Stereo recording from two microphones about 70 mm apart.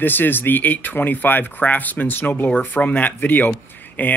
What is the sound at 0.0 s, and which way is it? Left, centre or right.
Speech, left.